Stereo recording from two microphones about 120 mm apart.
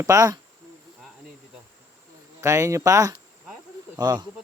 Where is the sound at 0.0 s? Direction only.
30° right (ahead or behind).